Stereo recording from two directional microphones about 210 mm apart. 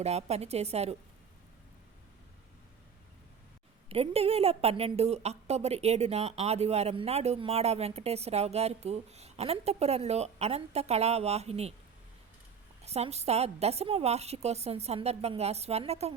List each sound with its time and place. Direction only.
0.0 s a woman's voice: 30° right (ahead or behind)
3.8 s a woman's voice: 25° right (ahead or behind)
12.8 s a woman's voice: 30° right (ahead or behind)